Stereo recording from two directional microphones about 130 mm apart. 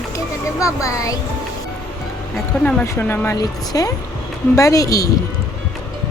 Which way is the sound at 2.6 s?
15° left (ahead or behind).